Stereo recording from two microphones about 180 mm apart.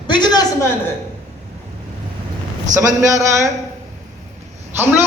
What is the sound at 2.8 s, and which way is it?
Speech, 15° right (ahead or behind).